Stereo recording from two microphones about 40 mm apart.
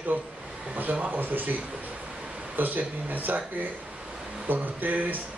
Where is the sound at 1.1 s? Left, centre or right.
Right.